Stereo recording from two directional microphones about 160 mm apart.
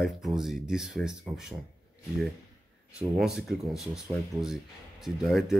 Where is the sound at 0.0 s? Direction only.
Centre (ahead or behind).